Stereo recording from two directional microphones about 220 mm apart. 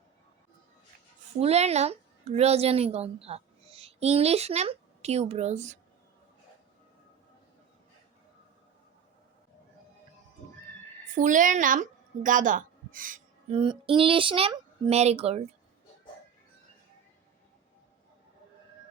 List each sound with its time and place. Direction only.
1.4 s a woman's voice: 30° right (ahead or behind)
11.1 s a woman's voice: 35° right (ahead or behind)
13.5 s speech: 25° right (ahead or behind)